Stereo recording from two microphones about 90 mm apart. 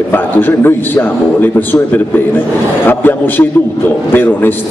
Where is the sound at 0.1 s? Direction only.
25° left (ahead or behind).